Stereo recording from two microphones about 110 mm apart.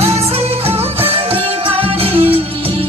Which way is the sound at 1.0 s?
60° right (ahead or behind).